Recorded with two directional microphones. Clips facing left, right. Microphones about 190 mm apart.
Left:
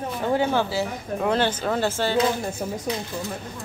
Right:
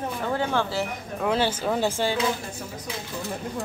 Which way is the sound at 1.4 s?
10° right (ahead or behind).